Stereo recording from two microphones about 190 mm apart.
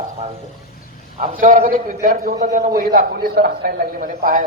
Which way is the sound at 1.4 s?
45° right (ahead or behind).